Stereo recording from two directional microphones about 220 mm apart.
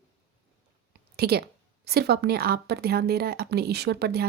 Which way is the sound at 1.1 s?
45° right (ahead or behind).